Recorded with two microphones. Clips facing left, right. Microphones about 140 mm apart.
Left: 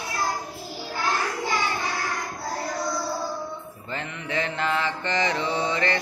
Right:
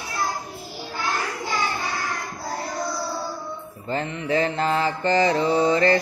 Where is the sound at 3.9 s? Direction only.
35° right (ahead or behind).